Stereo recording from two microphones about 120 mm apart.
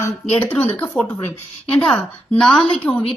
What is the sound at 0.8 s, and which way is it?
Speech, 15° left (ahead or behind).